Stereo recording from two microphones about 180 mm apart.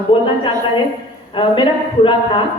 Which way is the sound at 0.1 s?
30° left (ahead or behind).